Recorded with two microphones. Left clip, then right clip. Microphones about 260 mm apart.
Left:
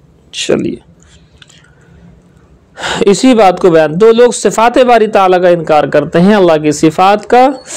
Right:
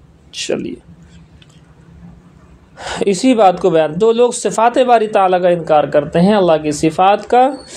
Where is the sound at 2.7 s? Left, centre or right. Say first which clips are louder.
Left 7 dB; left.